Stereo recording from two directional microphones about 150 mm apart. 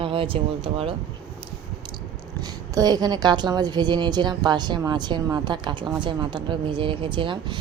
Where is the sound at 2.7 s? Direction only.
25° right (ahead or behind).